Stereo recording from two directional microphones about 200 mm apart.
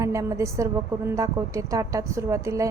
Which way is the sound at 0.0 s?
15° right (ahead or behind).